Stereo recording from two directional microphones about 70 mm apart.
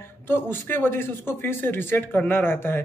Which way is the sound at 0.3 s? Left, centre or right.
Left.